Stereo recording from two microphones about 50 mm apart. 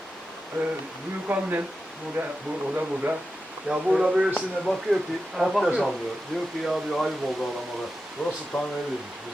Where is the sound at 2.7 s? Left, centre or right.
Right.